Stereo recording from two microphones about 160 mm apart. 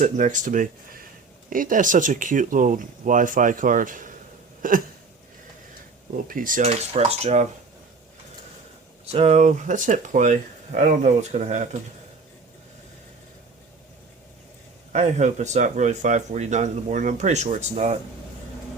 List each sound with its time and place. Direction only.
0.0 s speech: 50° right (ahead or behind)
6.2 s speech: 55° right (ahead or behind)
9.1 s speech: 45° right (ahead or behind)
14.9 s speech: 45° right (ahead or behind)